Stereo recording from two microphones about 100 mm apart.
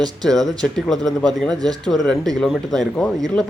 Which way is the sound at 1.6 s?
40° right (ahead or behind).